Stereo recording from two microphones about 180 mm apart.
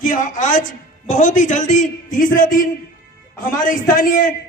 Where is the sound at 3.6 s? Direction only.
50° left (ahead or behind).